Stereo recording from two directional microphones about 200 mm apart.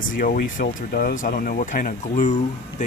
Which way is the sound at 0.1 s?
45° left (ahead or behind).